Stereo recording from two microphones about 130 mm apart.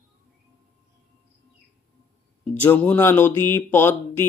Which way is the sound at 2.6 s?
10° left (ahead or behind).